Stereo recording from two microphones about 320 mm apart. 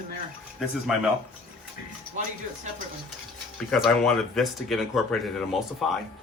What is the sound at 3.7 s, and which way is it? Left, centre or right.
Speech, centre.